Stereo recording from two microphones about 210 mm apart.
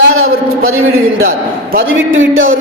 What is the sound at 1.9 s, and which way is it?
Speech, 70° right (ahead or behind).